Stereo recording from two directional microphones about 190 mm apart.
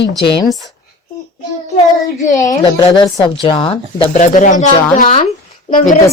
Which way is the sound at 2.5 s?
25° left (ahead or behind).